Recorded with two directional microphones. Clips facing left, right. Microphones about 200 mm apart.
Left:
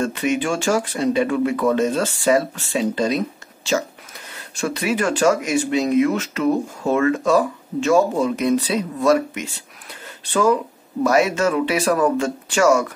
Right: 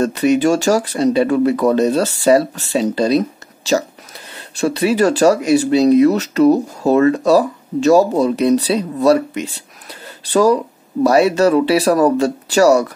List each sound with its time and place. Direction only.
0.0 s speech: 40° right (ahead or behind)